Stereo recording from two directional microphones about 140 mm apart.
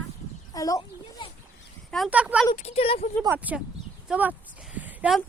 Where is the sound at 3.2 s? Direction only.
10° right (ahead or behind).